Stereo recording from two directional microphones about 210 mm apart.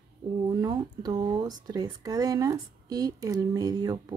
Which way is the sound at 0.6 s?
20° right (ahead or behind).